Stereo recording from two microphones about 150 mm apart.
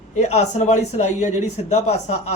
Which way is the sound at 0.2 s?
50° left (ahead or behind).